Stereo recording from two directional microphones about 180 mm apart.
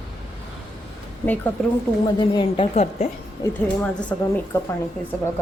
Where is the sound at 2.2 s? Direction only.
25° left (ahead or behind).